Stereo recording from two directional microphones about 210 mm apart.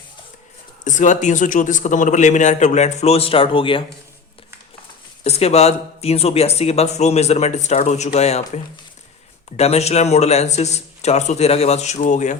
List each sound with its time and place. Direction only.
0.9 s speech: 35° left (ahead or behind)
5.2 s speech: 30° left (ahead or behind)